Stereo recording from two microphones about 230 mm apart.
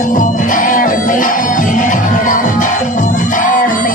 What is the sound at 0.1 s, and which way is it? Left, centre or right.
Music, left.